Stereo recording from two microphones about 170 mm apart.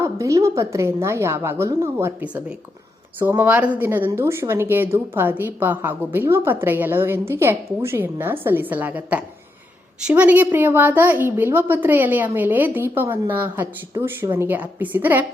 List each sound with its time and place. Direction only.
0.0 s a woman's voice: 20° right (ahead or behind)